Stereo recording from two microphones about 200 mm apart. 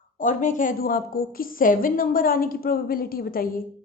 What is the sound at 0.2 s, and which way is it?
A woman's voice, 40° left (ahead or behind).